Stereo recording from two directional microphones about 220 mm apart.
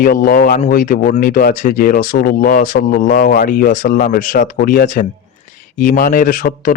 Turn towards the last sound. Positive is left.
turn(degrees=40)  # may be behind; listen again after turning